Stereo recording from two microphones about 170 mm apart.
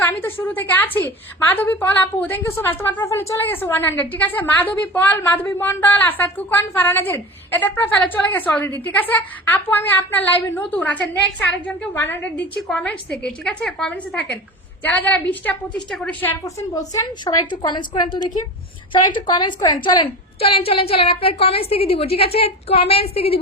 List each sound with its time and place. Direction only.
0.0 s a woman's voice: 10° left (ahead or behind)
16.4 s a woman's voice: 20° left (ahead or behind); by 23.4 s 35° left (ahead or behind)